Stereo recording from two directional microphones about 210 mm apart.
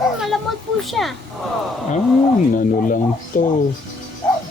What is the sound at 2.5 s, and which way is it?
Speech, 40° left (ahead or behind).